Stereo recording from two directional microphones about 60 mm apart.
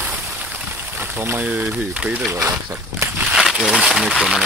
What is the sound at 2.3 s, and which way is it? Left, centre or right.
Speech, right.